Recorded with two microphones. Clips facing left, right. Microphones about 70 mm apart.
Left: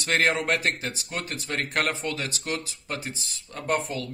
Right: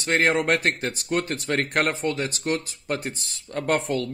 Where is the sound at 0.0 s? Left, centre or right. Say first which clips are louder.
Right 2 dB; right.